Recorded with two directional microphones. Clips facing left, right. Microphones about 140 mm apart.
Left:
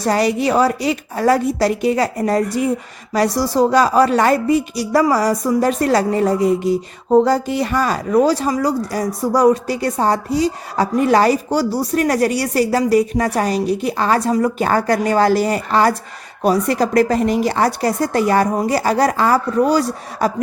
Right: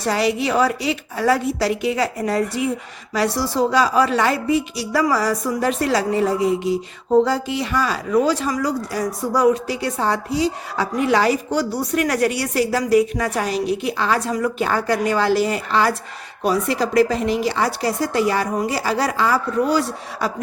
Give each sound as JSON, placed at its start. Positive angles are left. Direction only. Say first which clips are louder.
{"t": 0.0, "sound": "a woman's voice", "louder": "left 3 dB", "side_deg": 40}